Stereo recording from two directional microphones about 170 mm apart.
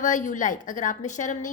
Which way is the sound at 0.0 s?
50° left (ahead or behind).